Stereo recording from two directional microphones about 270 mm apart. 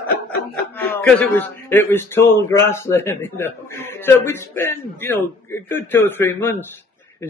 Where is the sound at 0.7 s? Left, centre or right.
Centre.